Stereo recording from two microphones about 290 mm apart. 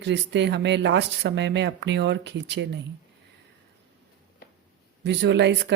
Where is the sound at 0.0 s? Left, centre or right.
Right.